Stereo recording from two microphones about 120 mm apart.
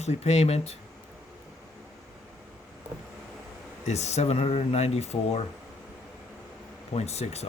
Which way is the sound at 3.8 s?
65° left (ahead or behind).